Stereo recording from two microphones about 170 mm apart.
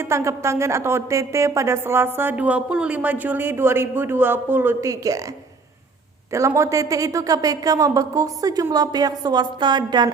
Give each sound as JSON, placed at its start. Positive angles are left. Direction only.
{"t": 0.0, "sound": "a woman's voice", "side_deg": -15}
{"t": 6.3, "sound": "speech", "side_deg": -20}